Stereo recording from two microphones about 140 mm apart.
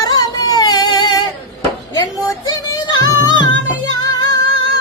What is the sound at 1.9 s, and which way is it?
Music, 30° left (ahead or behind).